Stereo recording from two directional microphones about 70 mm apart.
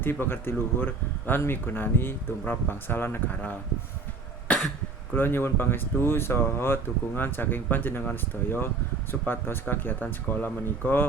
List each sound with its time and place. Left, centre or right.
0.0 s speech: left
4.4 s cough: centre
5.1 s speech: left